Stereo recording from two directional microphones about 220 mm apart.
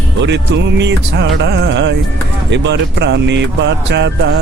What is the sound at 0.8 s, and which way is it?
Speech, 50° right (ahead or behind).